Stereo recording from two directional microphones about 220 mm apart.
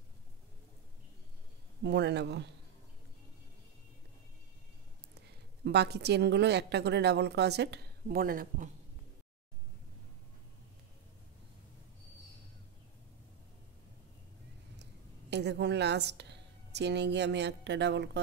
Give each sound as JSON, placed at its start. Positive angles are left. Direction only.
{"t": 1.8, "sound": "a woman's voice", "side_deg": -50}
{"t": 5.6, "sound": "a woman's voice", "side_deg": -50}
{"t": 14.8, "sound": "a woman's voice", "side_deg": -50}